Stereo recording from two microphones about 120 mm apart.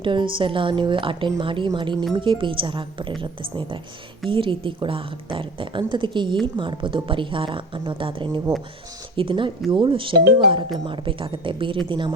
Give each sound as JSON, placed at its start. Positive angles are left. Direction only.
{"t": 0.0, "sound": "a woman's voice", "side_deg": -45}